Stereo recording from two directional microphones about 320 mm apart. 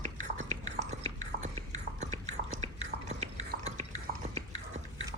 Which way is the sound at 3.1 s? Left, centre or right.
Right.